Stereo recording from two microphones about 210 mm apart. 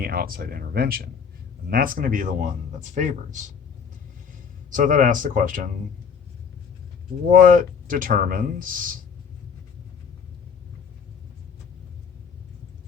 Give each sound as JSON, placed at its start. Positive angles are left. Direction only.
{"t": 0.0, "sound": "speech", "side_deg": -45}
{"t": 4.7, "sound": "speech", "side_deg": -40}
{"t": 7.3, "sound": "speech", "side_deg": -40}